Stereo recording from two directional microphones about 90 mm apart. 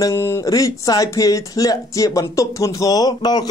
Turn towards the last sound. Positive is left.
turn(degrees=50)  # may be behind; listen again after turning